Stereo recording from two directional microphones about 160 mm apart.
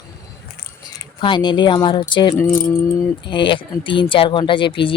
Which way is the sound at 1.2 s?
30° left (ahead or behind).